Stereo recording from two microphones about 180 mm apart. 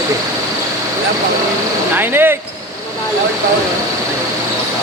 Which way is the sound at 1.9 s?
10° right (ahead or behind).